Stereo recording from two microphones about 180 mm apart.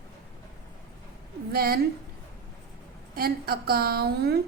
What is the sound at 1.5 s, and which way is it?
Speech, 60° right (ahead or behind).